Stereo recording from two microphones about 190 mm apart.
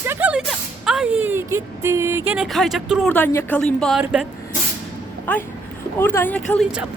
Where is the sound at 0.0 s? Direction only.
10° right (ahead or behind).